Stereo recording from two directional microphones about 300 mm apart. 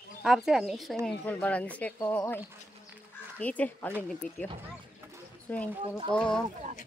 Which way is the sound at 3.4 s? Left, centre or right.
Centre.